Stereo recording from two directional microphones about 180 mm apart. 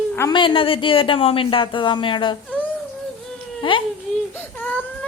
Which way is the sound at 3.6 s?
30° left (ahead or behind).